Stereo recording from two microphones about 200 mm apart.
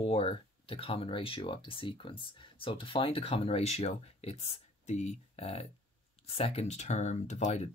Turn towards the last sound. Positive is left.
turn(degrees=35)  # may be behind; listen again after turning